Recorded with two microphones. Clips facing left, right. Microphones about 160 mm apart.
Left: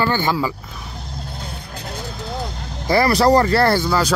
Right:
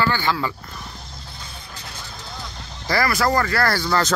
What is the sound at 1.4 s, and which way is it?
Vehicle, 60° left (ahead or behind).